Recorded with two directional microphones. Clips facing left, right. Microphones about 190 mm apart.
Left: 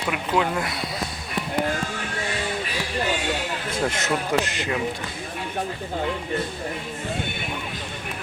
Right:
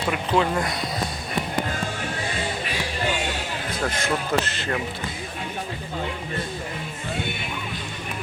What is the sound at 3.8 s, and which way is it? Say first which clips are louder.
Speech: left 1 dB; 15° left (ahead or behind).